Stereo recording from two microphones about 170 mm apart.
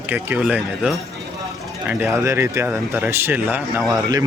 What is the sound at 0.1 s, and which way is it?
Speech, 10° right (ahead or behind).